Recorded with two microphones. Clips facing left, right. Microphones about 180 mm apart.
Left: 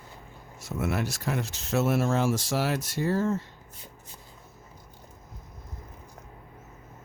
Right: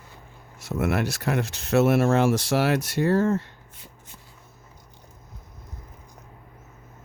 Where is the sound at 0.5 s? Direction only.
65° right (ahead or behind).